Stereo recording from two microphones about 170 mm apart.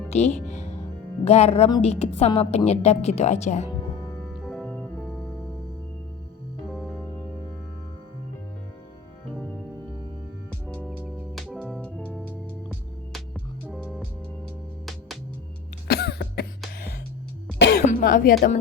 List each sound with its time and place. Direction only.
0.1 s music: 40° left (ahead or behind)
1.2 s a woman's voice: 40° left (ahead or behind)
4.4 s music: 5° left (ahead or behind)
10.8 s music: 5° right (ahead or behind)
13.7 s music: 5° left (ahead or behind)
15.9 s cough: 75° left (ahead or behind)
17.6 s cough: 80° left
17.8 s cough: 55° left (ahead or behind)